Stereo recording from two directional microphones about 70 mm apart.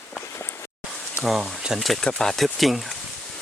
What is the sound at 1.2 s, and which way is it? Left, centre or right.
Speech, centre.